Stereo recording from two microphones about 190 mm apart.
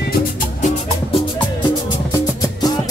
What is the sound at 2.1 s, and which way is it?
Music, 20° left (ahead or behind).